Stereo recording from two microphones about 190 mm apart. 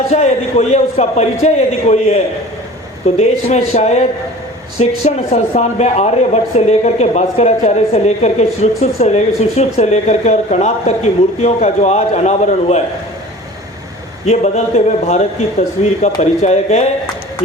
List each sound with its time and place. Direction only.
0.1 s speech: 35° left (ahead or behind)
14.3 s speech: 35° left (ahead or behind)